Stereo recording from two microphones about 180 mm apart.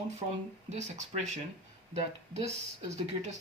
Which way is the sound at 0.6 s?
40° right (ahead or behind).